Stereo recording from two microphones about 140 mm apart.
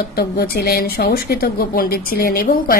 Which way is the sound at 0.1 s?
90° left.